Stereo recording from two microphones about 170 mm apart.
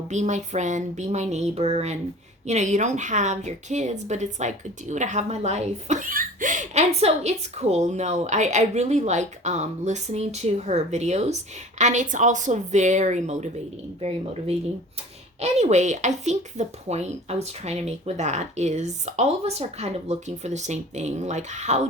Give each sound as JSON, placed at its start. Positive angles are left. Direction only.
{"t": 0.1, "sound": "a woman's voice", "side_deg": -45}